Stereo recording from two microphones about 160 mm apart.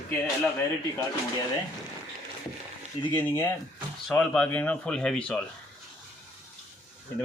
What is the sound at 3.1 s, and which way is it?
Speech, 10° left (ahead or behind).